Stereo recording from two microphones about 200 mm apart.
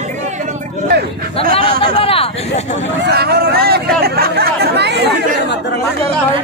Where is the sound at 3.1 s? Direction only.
55° right (ahead or behind).